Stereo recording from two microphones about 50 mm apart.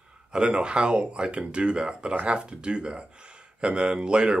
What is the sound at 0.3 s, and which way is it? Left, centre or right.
Speech, centre.